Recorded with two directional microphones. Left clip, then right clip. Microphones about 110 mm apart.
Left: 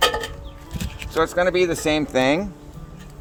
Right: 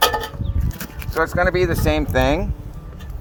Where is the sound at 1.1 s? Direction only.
30° left (ahead or behind).